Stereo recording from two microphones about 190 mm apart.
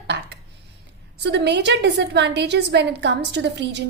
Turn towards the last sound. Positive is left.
turn(degrees=-65)  # may be behind; listen again after turning